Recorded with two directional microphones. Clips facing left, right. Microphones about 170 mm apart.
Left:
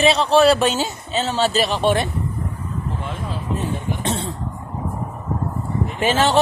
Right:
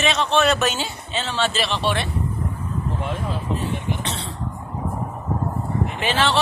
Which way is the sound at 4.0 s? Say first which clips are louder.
Left 5 dB; 50° left (ahead or behind).